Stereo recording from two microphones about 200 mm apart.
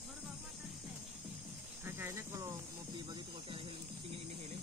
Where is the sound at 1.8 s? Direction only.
10° right (ahead or behind).